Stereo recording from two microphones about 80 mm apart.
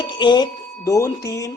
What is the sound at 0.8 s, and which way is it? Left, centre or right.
Speech, left.